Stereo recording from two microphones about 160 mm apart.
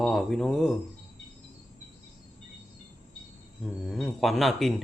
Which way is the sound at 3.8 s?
Centre (ahead or behind).